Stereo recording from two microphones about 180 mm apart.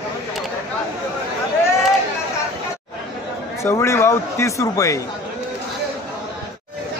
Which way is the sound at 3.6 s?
15° left (ahead or behind).